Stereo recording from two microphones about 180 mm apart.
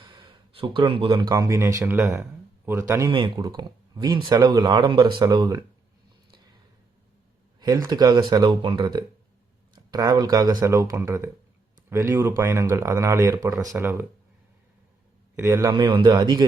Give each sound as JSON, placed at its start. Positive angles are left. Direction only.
{"t": 0.0, "sound": "speech", "side_deg": -25}
{"t": 7.6, "sound": "speech", "side_deg": -20}
{"t": 15.4, "sound": "speech", "side_deg": -15}